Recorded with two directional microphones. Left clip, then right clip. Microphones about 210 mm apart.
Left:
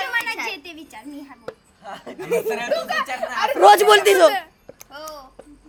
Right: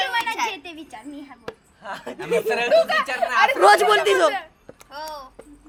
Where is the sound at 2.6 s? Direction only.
Centre (ahead or behind).